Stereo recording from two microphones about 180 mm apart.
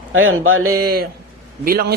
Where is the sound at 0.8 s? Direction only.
60° right (ahead or behind).